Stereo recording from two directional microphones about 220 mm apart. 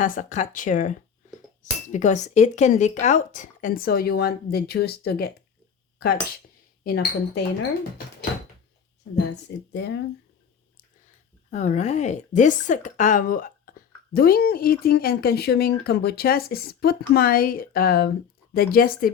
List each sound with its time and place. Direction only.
0.0 s speech: 35° left (ahead or behind)
6.8 s a woman's voice: 45° left (ahead or behind)
9.1 s a woman's voice: 50° left (ahead or behind)
11.5 s a woman's voice: 30° left (ahead or behind)